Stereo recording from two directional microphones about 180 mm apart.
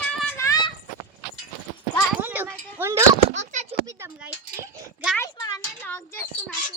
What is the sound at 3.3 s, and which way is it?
Speech, 40° right (ahead or behind).